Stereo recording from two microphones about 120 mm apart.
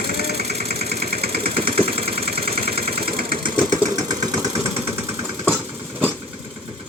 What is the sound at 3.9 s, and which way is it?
Engine, 35° right (ahead or behind).